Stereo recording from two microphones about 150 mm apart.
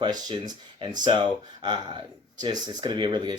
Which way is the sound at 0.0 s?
30° right (ahead or behind).